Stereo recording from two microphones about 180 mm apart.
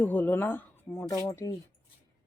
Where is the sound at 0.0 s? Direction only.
10° left (ahead or behind).